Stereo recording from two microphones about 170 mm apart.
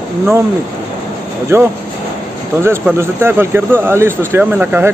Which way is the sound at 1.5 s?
15° right (ahead or behind).